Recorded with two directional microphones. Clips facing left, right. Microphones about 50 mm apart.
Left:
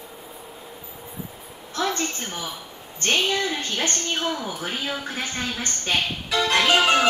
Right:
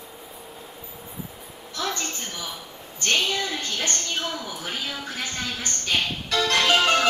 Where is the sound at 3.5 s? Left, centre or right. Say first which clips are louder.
Left 2 dB; left.